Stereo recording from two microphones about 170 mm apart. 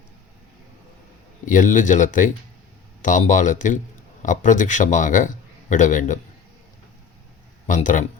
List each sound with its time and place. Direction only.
1.5 s a man's voice: 50° left (ahead or behind)
7.7 s a man's voice: 50° left (ahead or behind)